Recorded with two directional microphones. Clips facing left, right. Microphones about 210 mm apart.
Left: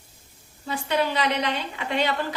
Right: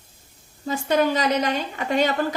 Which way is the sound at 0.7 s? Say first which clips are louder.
Right 5 dB; 45° right (ahead or behind).